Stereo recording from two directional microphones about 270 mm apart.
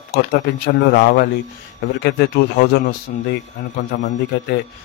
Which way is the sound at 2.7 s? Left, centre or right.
Left.